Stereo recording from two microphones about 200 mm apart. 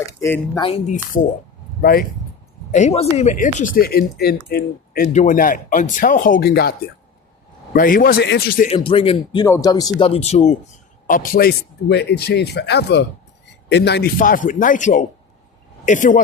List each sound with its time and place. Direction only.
0.0 s speech: 15° left (ahead or behind)
0.6 s speech: 30° left (ahead or behind)
1.8 s speech: 50° left (ahead or behind)
2.7 s speech: 35° left (ahead or behind); by 5.0 s 50° left (ahead or behind)
5.1 s speech: 40° left (ahead or behind)
8.6 s speech: 25° left (ahead or behind)
10.1 s speech: 30° left (ahead or behind)